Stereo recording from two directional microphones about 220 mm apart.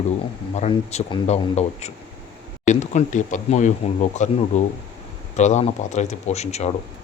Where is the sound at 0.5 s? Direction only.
30° left (ahead or behind).